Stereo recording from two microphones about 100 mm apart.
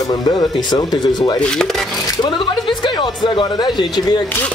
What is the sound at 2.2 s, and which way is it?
Speech, 50° left (ahead or behind).